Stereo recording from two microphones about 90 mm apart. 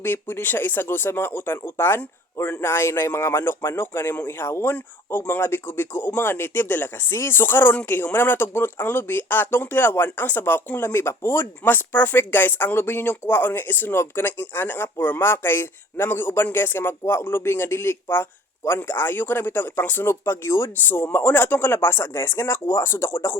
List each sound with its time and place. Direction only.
0.0 s speech: 25° left (ahead or behind)